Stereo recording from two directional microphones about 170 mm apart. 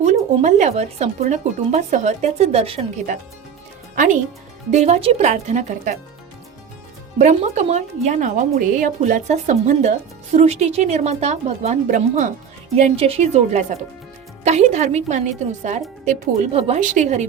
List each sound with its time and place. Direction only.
0.0 s speech: 45° right (ahead or behind)
3.9 s speech: 50° right (ahead or behind)
7.2 s speech: 45° right (ahead or behind)
12.7 s speech: 35° right (ahead or behind)